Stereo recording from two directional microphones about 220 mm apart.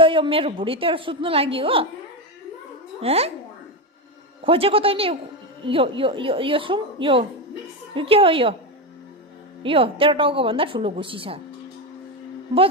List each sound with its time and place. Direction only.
0.0 s a woman's voice: 25° right (ahead or behind)
3.0 s a woman's voice: 25° right (ahead or behind)
4.4 s a woman's voice: 25° right (ahead or behind)
9.6 s a woman's voice: 25° right (ahead or behind)